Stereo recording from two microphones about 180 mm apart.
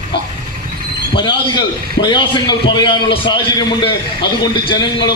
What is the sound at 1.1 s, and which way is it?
A man's voice, 25° left (ahead or behind).